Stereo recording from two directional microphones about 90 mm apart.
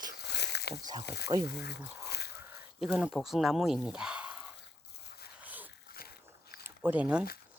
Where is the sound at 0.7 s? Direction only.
45° right (ahead or behind).